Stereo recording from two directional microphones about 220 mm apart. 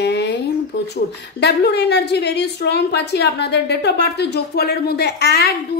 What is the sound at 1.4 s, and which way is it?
A woman's voice, 50° left (ahead or behind).